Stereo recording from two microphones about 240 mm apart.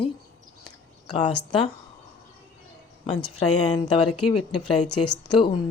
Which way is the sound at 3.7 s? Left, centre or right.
Left.